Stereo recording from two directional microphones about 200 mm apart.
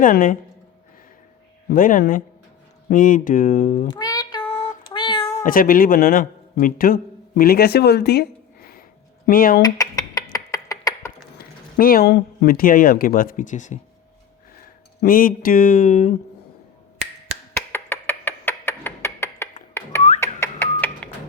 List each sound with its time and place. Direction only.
0.0 s speech: 45° left (ahead or behind)
1.7 s speech: 45° left (ahead or behind)
3.8 s meow: 20° left (ahead or behind); by 8.8 s 50° left (ahead or behind)
9.2 s speech: 45° left (ahead or behind)
9.6 s a sound: 20° left (ahead or behind)
11.8 s speech: 50° left (ahead or behind)
17.5 s a sound: 10° left (ahead or behind)
20.1 s alarm clock: 10° left (ahead or behind)